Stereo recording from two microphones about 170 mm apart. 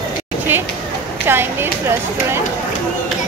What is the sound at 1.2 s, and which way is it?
Speech, 15° right (ahead or behind).